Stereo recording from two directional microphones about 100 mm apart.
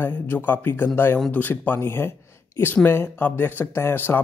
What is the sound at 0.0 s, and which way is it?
Speech, 20° left (ahead or behind).